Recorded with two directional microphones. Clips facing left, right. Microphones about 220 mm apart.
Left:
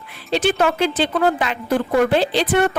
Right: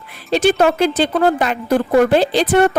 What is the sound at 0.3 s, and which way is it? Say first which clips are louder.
A woman's voice: right 4 dB; 40° right (ahead or behind).